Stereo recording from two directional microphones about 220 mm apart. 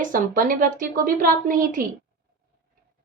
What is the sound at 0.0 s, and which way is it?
A woman's voice, 40° right (ahead or behind).